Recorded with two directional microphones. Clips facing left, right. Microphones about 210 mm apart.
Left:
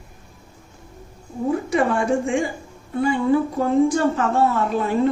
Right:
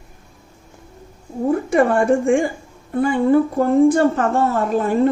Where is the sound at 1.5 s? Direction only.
50° right (ahead or behind).